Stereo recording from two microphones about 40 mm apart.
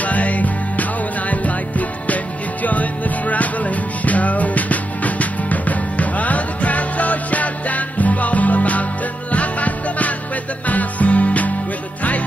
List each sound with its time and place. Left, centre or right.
0.0 s music: left